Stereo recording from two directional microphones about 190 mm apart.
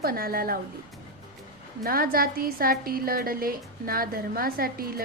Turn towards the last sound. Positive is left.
turn(degrees=-50)  # may be behind; listen again after turning